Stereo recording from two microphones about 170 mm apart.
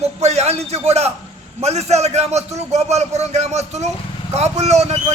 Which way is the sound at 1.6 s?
40° right (ahead or behind).